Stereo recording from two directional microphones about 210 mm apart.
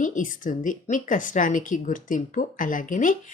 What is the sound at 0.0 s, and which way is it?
A woman's voice, 40° left (ahead or behind).